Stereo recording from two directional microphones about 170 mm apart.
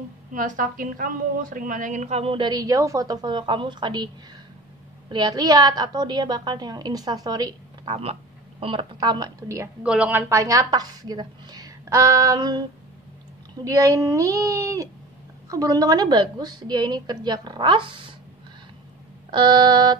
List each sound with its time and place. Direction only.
0.3 s a woman's voice: 50° right (ahead or behind); by 4.1 s 25° right (ahead or behind)
5.1 s a woman's voice: 25° right (ahead or behind)
7.9 s a woman's voice: 35° right (ahead or behind)
9.8 s a woman's voice: 10° right (ahead or behind); by 12.6 s 25° right (ahead or behind)
13.7 s a woman's voice: 20° right (ahead or behind)
19.3 s a woman's voice: 25° right (ahead or behind)